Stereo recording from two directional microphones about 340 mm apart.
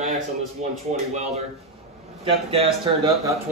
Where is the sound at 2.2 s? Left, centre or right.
Centre.